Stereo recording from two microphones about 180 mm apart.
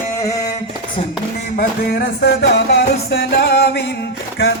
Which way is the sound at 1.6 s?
60° left (ahead or behind).